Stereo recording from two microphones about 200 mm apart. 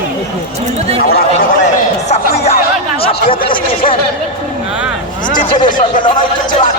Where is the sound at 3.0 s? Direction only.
25° left (ahead or behind).